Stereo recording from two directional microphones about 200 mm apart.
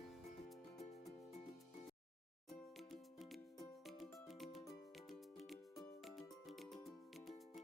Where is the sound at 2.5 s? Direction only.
Centre (ahead or behind).